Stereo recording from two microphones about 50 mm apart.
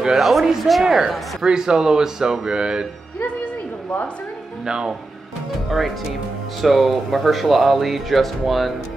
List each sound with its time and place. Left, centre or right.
0.0 s speech: centre
4.6 s speech: centre
6.6 s speech: centre